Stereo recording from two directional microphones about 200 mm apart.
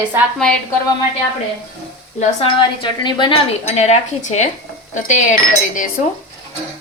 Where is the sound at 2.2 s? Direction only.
25° left (ahead or behind).